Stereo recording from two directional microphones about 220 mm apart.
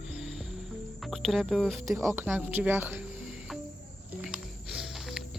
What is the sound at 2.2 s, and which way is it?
Speech, 10° right (ahead or behind).